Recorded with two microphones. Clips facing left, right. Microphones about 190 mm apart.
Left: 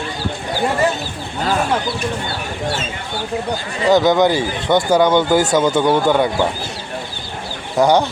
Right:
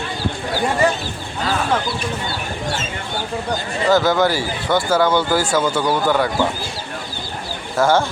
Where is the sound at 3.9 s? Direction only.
20° left (ahead or behind).